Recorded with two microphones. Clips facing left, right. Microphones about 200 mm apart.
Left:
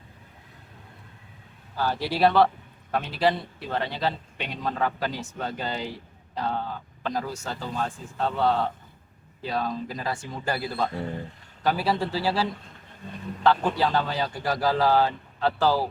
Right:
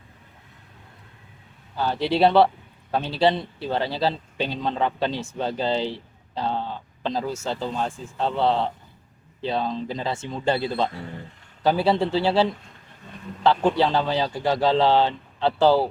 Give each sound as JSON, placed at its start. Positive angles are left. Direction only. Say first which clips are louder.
{"t": 1.7, "sound": "a man's voice", "louder": "right 4 dB", "side_deg": -25}